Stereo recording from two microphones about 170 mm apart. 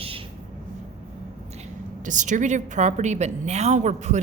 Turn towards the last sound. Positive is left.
turn(degrees=-45)  # may be behind; listen again after turning